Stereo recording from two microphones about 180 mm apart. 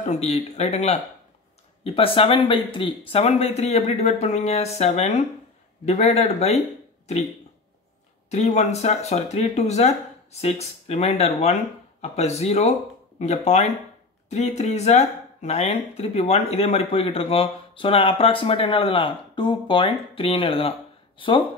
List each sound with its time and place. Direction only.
0.0 s speech: 35° left (ahead or behind)
8.3 s speech: 40° left (ahead or behind)